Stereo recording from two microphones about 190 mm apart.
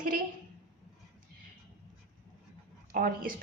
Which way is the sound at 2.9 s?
45° right (ahead or behind).